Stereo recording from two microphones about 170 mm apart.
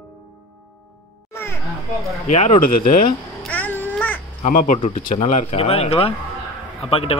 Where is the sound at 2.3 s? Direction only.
40° left (ahead or behind).